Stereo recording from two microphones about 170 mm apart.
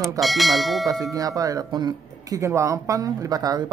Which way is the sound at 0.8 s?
20° right (ahead or behind).